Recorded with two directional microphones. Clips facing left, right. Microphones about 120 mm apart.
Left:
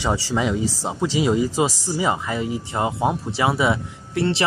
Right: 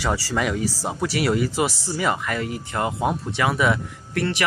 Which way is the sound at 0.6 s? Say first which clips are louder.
Left 2 dB; 85° right.